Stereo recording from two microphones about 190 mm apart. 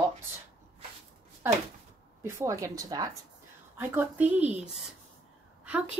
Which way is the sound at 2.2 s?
15° right (ahead or behind).